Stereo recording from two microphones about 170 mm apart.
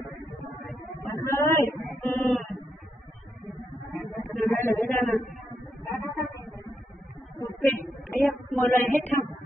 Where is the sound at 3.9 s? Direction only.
Centre (ahead or behind).